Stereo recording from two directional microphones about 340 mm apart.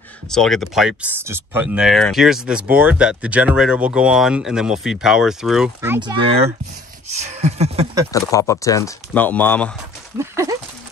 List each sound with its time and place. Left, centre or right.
0.3 s speech: centre
7.2 s speech: centre
8.1 s speech: centre
10.1 s speech: centre